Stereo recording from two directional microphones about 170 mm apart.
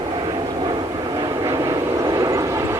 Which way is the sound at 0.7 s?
25° right (ahead or behind).